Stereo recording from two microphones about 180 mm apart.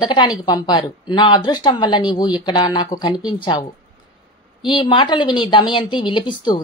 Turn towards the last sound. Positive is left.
turn(degrees=25)  # may be behind; listen again after turning